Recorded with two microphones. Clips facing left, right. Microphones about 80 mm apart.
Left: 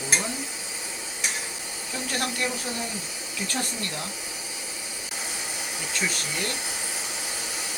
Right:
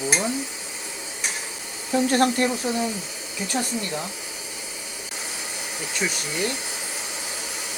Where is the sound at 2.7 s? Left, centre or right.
Right.